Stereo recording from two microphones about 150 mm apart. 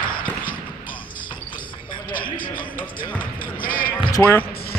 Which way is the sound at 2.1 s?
70° left (ahead or behind).